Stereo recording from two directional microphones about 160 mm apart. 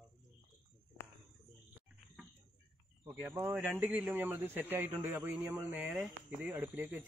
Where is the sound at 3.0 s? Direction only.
15° right (ahead or behind).